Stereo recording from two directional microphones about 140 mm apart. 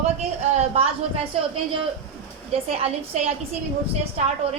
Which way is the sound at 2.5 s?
45° right (ahead or behind).